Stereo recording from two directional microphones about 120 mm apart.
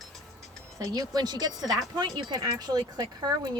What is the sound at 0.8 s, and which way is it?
Speech, 30° right (ahead or behind).